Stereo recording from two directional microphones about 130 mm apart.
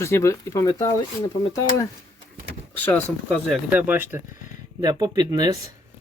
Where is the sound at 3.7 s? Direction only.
15° right (ahead or behind).